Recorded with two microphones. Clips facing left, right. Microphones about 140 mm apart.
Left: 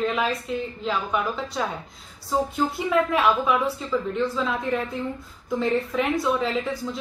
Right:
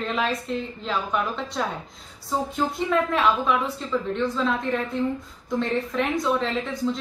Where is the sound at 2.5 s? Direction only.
5° left (ahead or behind).